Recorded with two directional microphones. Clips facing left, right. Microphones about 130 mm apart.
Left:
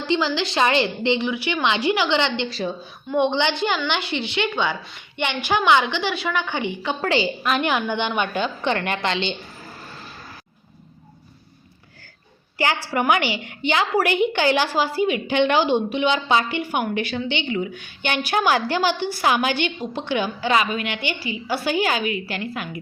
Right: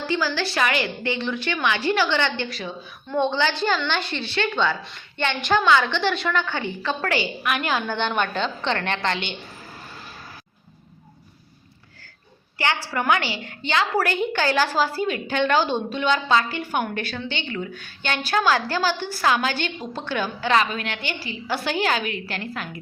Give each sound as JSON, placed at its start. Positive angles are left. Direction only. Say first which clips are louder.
{"t": 0.1, "sound": "a woman's voice", "louder": "left 3 dB", "side_deg": 20}
{"t": 1.3, "sound": "a woman's voice", "louder": "left 2 dB", "side_deg": 10}
{"t": 12.9, "sound": "a woman's voice", "louder": "left 3 dB", "side_deg": 15}